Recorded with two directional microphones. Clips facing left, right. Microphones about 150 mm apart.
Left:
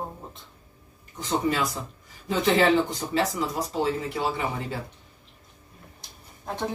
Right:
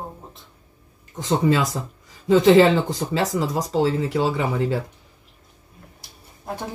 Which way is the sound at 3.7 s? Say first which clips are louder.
Right 6 dB; 90° right.